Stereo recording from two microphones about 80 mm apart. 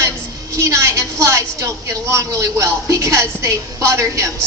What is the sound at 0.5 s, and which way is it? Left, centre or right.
A woman's voice, right.